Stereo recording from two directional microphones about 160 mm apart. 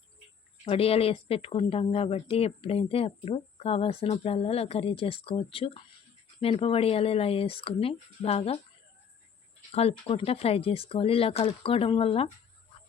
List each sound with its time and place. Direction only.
0.6 s speech: 35° left (ahead or behind)
9.7 s speech: 40° left (ahead or behind)